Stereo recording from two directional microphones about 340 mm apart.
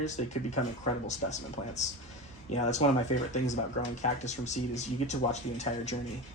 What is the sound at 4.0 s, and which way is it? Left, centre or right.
Speech, centre.